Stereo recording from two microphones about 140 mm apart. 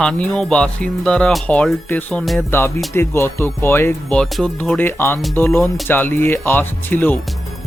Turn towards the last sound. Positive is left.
turn(degrees=15)  # may be behind; listen again after turning